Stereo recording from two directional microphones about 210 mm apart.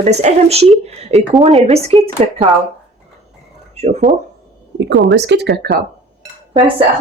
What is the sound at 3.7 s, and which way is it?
Speech, 35° right (ahead or behind).